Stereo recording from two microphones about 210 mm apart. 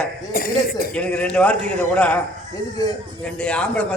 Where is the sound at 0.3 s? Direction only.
45° left (ahead or behind).